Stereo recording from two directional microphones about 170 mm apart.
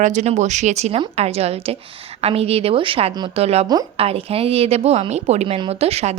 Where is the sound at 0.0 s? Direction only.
45° right (ahead or behind).